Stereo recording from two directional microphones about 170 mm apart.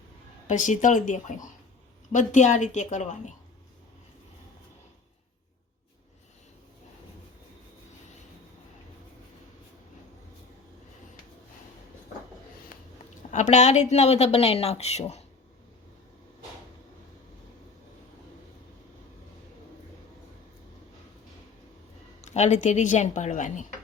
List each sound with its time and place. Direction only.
0.4 s speech: 45° left (ahead or behind)
13.3 s a woman's voice: 45° left (ahead or behind)
22.2 s speech: 40° left (ahead or behind)